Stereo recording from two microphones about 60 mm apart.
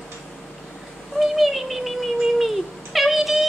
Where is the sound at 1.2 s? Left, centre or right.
Centre.